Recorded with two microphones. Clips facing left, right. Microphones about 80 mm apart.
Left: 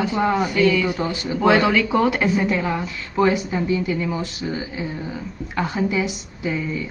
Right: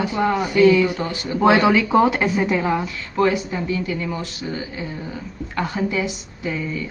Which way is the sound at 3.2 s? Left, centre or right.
Centre.